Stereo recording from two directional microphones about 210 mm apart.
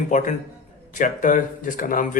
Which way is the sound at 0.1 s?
35° left (ahead or behind).